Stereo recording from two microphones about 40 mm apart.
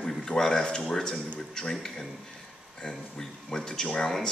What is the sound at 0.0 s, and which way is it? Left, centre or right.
A man's voice, centre.